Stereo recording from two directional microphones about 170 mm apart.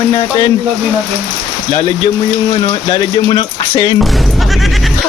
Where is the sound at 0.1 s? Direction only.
25° left (ahead or behind).